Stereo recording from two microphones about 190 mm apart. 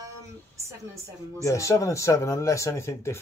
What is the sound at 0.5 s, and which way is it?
Speech, 15° right (ahead or behind).